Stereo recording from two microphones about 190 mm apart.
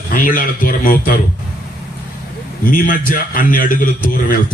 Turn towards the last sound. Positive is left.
turn(degrees=45)  # may be behind; listen again after turning